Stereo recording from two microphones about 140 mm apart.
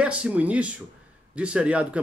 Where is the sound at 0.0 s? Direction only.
10° right (ahead or behind).